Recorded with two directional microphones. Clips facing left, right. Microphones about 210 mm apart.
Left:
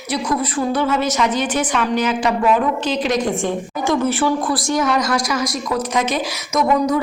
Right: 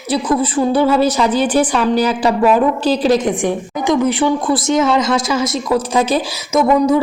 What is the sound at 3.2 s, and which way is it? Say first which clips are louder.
A woman's voice: right 3 dB; 15° right (ahead or behind).